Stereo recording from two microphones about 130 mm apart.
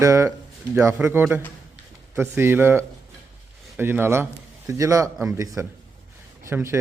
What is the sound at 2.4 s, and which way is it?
A man's voice, 15° right (ahead or behind).